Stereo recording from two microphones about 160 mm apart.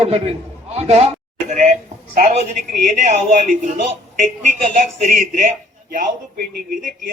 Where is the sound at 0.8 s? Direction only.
40° right (ahead or behind).